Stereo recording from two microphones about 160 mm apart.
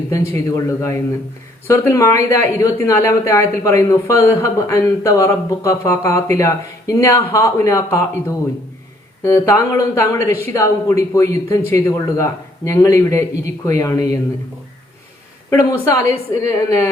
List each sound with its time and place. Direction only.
0.3 s speech: 15° left (ahead or behind)
9.2 s speech: 15° left (ahead or behind)
15.4 s speech: 15° left (ahead or behind)